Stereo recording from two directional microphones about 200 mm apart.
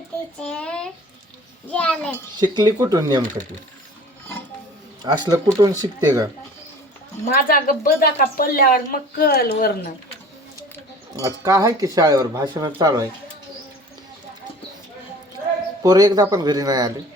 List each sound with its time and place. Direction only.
0.3 s a child's voice: 5° left (ahead or behind)
2.3 s speech: 20° right (ahead or behind)
5.0 s speech: 20° right (ahead or behind)
7.3 s a woman's voice: 45° left (ahead or behind)
11.2 s speech: 15° right (ahead or behind)
15.8 s speech: 20° right (ahead or behind)